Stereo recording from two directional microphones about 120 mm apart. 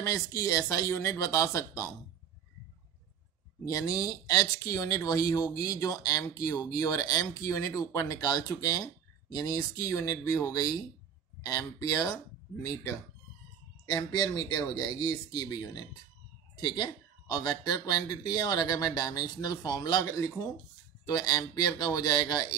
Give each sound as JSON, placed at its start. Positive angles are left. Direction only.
{"t": 0.0, "sound": "speech", "side_deg": 25}
{"t": 3.6, "sound": "speech", "side_deg": 30}
{"t": 13.9, "sound": "speech", "side_deg": 35}